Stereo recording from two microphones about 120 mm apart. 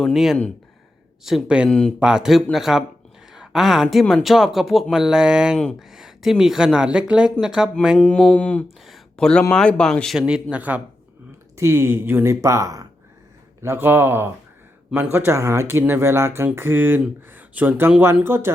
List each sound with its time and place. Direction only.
0.0 s speech: 5° right (ahead or behind)
8.0 s speech: 10° left (ahead or behind)
10.2 s speech: 5° right (ahead or behind)